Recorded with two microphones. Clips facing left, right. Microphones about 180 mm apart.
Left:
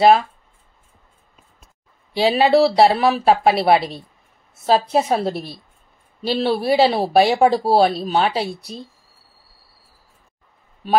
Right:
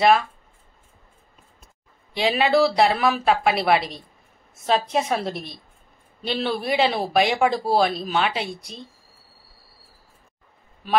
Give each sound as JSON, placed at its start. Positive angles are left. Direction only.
{"t": 2.1, "sound": "speech", "side_deg": 35}